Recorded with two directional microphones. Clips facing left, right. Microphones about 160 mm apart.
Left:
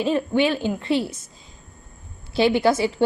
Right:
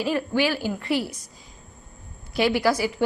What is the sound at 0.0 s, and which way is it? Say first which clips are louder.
A woman's voice: left 3 dB; 25° left (ahead or behind).